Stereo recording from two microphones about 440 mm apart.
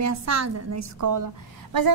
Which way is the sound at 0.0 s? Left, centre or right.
Right.